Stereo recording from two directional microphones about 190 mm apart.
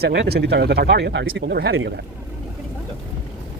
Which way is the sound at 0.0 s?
60° right (ahead or behind).